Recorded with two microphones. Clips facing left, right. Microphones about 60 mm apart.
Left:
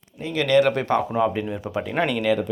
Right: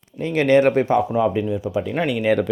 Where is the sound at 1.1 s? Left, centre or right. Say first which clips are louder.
Right 1 dB; centre.